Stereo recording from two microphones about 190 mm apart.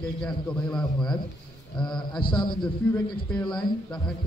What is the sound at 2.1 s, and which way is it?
Speech, 25° left (ahead or behind).